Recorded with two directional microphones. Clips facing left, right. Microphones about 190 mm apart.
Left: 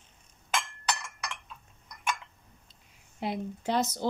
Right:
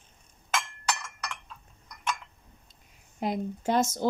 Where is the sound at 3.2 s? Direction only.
45° right (ahead or behind).